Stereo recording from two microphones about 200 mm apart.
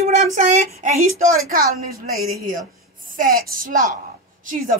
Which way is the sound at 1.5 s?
50° right (ahead or behind).